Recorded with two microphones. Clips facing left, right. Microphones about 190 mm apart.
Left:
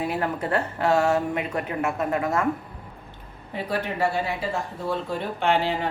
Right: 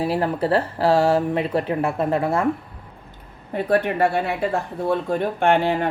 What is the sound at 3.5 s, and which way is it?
Speech, 55° right (ahead or behind).